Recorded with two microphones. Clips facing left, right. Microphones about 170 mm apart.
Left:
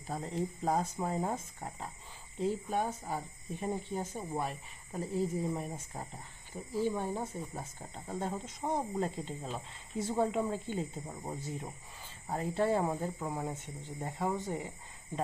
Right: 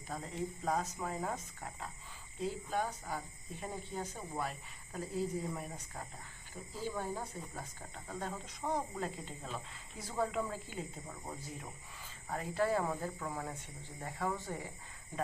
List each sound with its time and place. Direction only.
0.1 s speech: 30° left (ahead or behind)